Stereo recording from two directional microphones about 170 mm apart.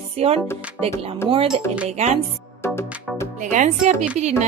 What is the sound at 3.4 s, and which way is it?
Speech, 45° right (ahead or behind).